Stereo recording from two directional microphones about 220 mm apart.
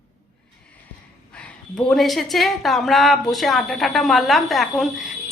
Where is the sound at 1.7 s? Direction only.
Centre (ahead or behind).